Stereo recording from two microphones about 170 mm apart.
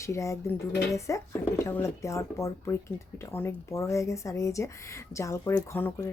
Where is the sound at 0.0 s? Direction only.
15° left (ahead or behind).